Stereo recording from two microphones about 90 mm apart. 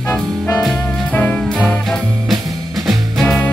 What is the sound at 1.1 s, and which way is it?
Music, 15° left (ahead or behind).